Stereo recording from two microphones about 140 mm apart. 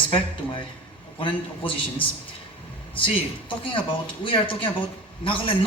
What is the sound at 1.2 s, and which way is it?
Speech, 40° left (ahead or behind).